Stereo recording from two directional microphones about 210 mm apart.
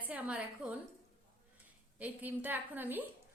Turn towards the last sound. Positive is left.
turn(degrees=-10)  # may be behind; listen again after turning